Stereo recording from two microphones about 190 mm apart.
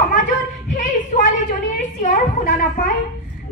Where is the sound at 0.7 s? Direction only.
40° left (ahead or behind).